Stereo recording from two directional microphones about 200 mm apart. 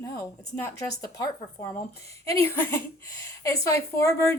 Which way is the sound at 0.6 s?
15° left (ahead or behind).